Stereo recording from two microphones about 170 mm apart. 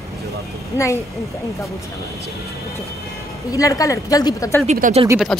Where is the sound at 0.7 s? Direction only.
15° left (ahead or behind).